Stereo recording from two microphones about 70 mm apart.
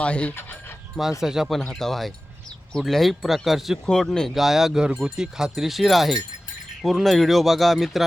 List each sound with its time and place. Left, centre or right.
0.0 s speech: centre
1.2 s speech: centre
1.5 s speech: centre
3.8 s speech: centre
4.4 s speech: centre